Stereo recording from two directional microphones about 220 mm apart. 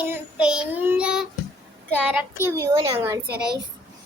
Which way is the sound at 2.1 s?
10° right (ahead or behind).